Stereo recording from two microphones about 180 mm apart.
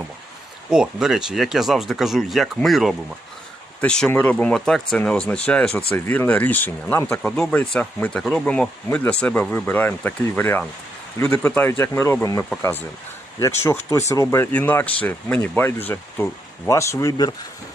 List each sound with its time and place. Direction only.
0.7 s speech: 5° right (ahead or behind); by 12.5 s 15° left (ahead or behind)
13.6 s speech: 15° left (ahead or behind)